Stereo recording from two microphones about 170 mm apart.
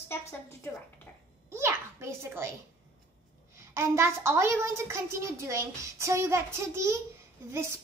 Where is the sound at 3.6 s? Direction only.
15° right (ahead or behind).